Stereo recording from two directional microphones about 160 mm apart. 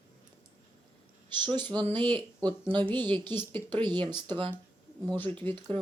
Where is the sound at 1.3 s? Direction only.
25° right (ahead or behind).